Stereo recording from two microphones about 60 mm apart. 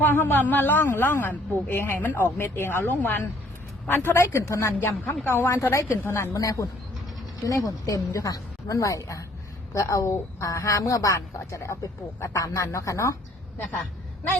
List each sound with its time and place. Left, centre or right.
0.0 s a woman's voice: left
4.1 s a woman's voice: left
6.1 s a woman's voice: left
6.3 s a woman's voice: left
8.1 s a woman's voice: left